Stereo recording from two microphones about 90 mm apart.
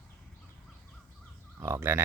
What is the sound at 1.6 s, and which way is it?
Speech, 30° right (ahead or behind).